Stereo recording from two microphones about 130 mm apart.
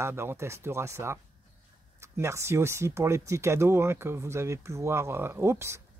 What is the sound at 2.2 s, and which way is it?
Speech, 20° right (ahead or behind).